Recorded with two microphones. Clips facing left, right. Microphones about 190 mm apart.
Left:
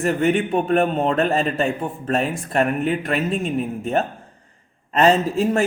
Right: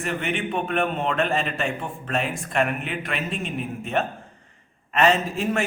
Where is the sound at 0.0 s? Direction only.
40° left (ahead or behind).